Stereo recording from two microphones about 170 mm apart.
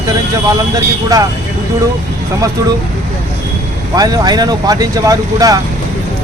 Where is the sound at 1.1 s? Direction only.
20° right (ahead or behind).